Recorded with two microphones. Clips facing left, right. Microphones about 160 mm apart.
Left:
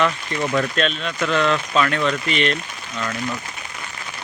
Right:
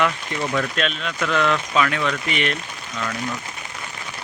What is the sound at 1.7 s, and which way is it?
Speech, 10° right (ahead or behind).